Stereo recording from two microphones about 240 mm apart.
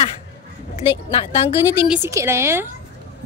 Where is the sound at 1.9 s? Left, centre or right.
Centre.